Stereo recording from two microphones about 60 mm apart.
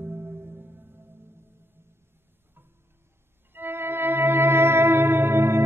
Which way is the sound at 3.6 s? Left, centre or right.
Right.